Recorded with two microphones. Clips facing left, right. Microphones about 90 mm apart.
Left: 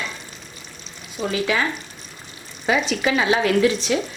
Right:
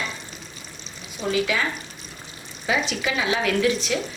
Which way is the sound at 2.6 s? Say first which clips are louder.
Left 4 dB; 45° left (ahead or behind).